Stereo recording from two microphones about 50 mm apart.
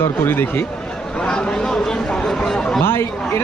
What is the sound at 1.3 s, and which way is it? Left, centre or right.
Speech, centre.